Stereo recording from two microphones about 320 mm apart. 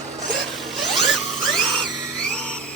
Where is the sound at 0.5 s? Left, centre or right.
Centre.